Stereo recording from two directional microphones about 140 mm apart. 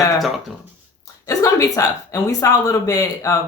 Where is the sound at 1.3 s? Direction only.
25° left (ahead or behind).